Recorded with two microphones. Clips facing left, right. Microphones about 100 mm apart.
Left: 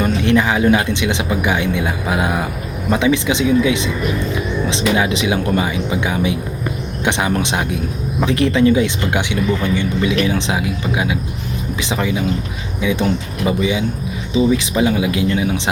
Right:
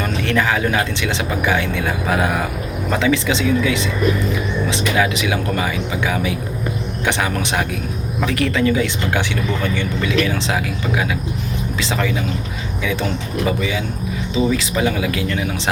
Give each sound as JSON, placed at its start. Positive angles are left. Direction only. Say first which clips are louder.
{"t": 0.0, "sound": "speech", "louder": "left 4 dB", "side_deg": 20}